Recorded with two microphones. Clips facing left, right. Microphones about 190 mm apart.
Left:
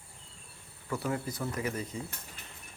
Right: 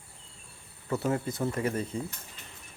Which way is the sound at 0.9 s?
25° right (ahead or behind).